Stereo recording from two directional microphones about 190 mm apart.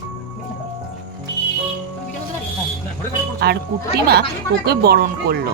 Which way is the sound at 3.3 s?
60° right (ahead or behind).